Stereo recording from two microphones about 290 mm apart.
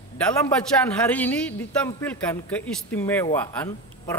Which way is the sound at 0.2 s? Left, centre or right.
Centre.